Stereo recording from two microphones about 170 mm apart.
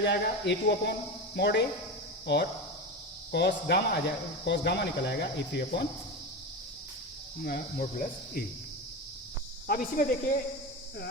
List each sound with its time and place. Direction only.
0.0 s speech: 90° left
3.3 s speech: 80° left
7.4 s speech: 60° left (ahead or behind)
9.6 s speech: 55° left (ahead or behind)